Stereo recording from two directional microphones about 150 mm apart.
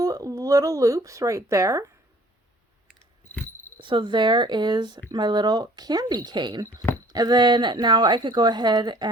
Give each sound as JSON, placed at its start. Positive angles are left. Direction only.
{"t": 0.0, "sound": "speech", "side_deg": -25}
{"t": 3.8, "sound": "speech", "side_deg": -35}